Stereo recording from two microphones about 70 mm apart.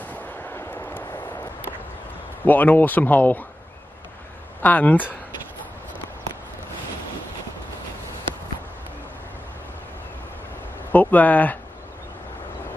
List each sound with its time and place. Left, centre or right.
0.0 s artillery fire: left
0.6 s vehicle: left
2.4 s speech: left
4.6 s speech: left
10.9 s speech: left